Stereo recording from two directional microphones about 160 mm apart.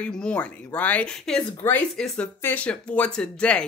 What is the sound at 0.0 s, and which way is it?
Speech, 10° left (ahead or behind).